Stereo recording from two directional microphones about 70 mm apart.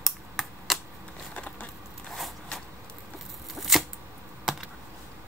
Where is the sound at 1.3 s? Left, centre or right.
Left.